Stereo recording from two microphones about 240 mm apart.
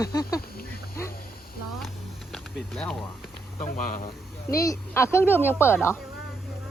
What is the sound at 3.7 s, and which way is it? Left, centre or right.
Speech, left.